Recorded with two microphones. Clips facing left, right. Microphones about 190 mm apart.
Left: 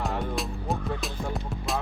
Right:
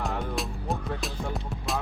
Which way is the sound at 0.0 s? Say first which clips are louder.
Left 1 dB; centre (ahead or behind).